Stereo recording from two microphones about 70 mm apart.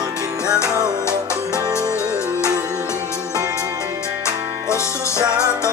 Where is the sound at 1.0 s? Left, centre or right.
Left.